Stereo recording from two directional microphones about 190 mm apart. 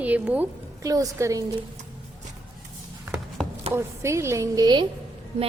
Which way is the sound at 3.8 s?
15° right (ahead or behind).